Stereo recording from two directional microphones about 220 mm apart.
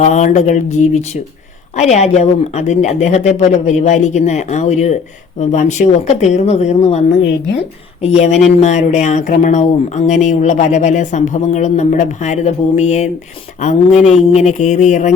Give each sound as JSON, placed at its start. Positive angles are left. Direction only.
{"t": 0.0, "sound": "speech", "side_deg": 30}
{"t": 8.0, "sound": "speech", "side_deg": 30}